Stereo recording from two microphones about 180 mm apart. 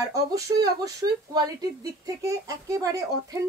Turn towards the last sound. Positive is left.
turn(degrees=-20)  # may be behind; listen again after turning